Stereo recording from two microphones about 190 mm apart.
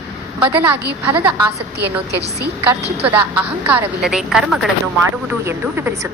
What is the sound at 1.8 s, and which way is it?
Speech, 60° right (ahead or behind).